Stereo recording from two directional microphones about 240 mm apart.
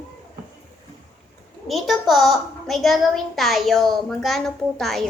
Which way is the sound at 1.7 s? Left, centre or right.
Centre.